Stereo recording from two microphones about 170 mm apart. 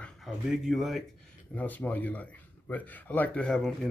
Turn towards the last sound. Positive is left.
turn(degrees=0)  # may be behind; listen again after turning